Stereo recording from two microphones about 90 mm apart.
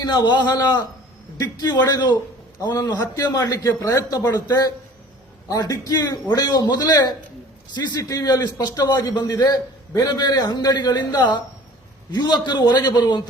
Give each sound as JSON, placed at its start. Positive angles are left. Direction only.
{"t": 0.0, "sound": "a man's voice", "side_deg": 50}